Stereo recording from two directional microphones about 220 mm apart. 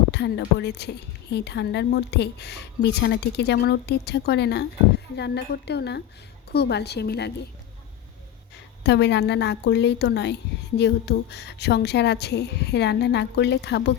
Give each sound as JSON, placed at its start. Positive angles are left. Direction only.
{"t": 0.1, "sound": "a woman's voice", "side_deg": 50}
{"t": 8.8, "sound": "a woman's voice", "side_deg": 50}